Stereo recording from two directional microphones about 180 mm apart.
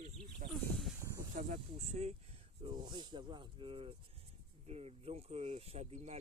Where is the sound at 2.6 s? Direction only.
25° right (ahead or behind).